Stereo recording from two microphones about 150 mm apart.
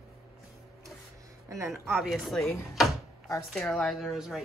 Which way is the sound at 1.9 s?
Centre (ahead or behind).